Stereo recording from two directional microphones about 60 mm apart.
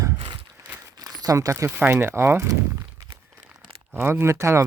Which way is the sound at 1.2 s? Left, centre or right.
Right.